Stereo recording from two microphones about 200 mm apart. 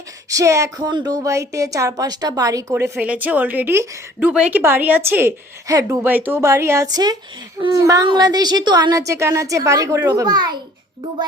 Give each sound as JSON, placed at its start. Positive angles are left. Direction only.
{"t": 0.3, "sound": "a woman's voice", "side_deg": -15}